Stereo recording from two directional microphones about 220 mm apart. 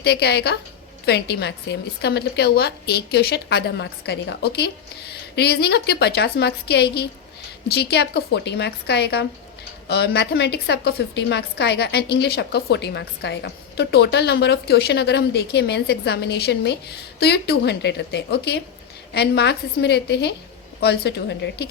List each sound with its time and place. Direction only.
0.0 s a woman's voice: 45° left (ahead or behind)